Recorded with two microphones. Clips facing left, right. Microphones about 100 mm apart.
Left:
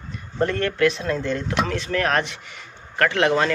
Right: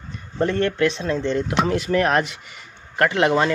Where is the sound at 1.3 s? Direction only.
25° right (ahead or behind).